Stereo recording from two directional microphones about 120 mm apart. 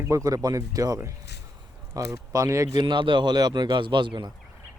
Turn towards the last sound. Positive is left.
turn(degrees=-40)  # may be behind; listen again after turning